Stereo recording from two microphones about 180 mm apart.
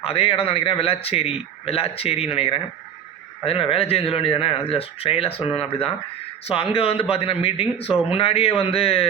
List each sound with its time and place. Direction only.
0.0 s speech: 30° left (ahead or behind)
6.4 s speech: 30° left (ahead or behind)